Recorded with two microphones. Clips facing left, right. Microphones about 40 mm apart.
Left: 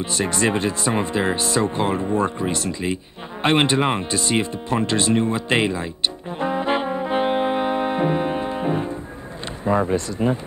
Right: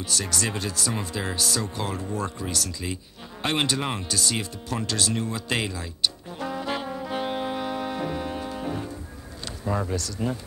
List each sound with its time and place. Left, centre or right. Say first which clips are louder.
0.0 s speech: left 7 dB; left
3.4 s music: left 8 dB; left
9.7 s speech: left 8 dB; left